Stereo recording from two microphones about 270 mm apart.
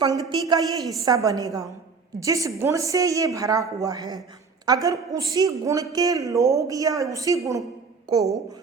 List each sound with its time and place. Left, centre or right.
0.0 s a woman's voice: centre
0.8 s a woman's voice: centre
1.0 s a woman's voice: centre